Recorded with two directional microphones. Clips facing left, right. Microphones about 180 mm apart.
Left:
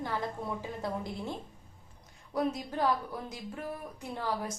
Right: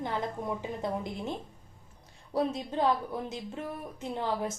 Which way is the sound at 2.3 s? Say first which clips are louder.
Right 2 dB; 25° right (ahead or behind).